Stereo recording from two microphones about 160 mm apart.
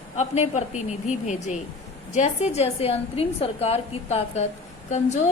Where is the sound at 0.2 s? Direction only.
45° left (ahead or behind).